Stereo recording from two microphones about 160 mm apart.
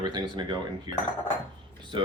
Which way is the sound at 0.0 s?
25° right (ahead or behind).